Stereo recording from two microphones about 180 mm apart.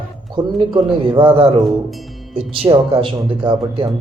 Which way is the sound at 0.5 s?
30° right (ahead or behind).